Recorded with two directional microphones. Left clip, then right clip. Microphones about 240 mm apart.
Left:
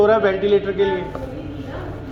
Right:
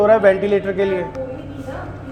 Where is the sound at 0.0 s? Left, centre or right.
Right.